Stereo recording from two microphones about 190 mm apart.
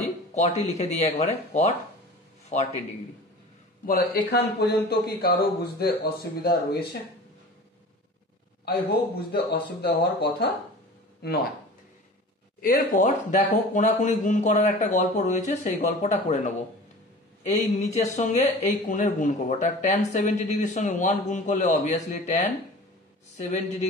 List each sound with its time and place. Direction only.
0.3 s speech: 35° left (ahead or behind)
3.8 s speech: 55° left (ahead or behind)
9.3 s speech: 60° left (ahead or behind)
12.6 s speech: 40° left (ahead or behind)
17.8 s speech: 40° left (ahead or behind)